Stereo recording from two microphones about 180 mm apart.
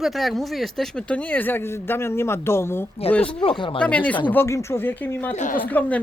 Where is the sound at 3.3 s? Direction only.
30° left (ahead or behind).